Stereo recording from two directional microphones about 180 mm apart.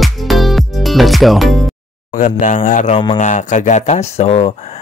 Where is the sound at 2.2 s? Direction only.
45° left (ahead or behind).